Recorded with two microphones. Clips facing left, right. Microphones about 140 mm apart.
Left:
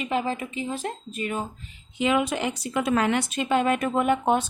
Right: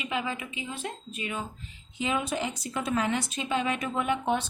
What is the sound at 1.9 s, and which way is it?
A woman's voice, 75° left (ahead or behind).